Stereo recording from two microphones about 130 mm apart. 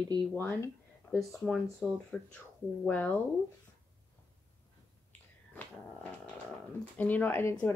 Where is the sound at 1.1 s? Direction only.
Centre (ahead or behind).